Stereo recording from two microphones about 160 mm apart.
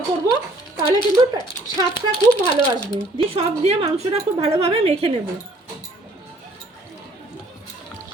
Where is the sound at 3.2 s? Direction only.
40° right (ahead or behind).